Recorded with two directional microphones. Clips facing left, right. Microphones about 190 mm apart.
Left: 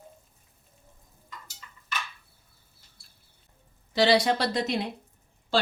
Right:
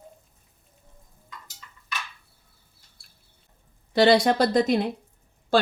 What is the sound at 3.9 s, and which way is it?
Speech, 50° right (ahead or behind).